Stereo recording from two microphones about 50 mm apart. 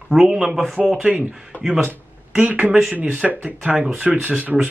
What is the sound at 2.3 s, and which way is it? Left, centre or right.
Speech, right.